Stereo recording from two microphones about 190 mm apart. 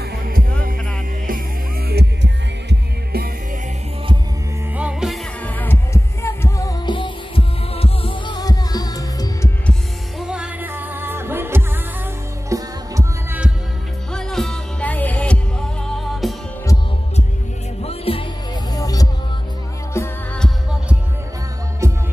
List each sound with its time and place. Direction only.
1.9 s music: 60° right (ahead or behind)
4.7 s music: 5° right (ahead or behind)
5.4 s heart sounds: 10° left (ahead or behind)
6.2 s music: 15° left (ahead or behind)
9.7 s music: centre (ahead or behind)
14.1 s music: centre (ahead or behind)
17.8 s music: 30° left (ahead or behind)
18.7 s music: 20° left (ahead or behind)